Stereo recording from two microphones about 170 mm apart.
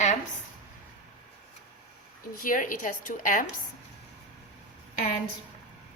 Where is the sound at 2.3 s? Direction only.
55° left (ahead or behind).